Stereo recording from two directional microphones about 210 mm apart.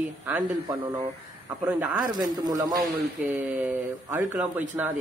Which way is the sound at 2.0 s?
20° right (ahead or behind).